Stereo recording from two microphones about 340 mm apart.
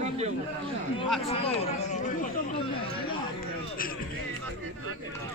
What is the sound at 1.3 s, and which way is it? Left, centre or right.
Speech, centre.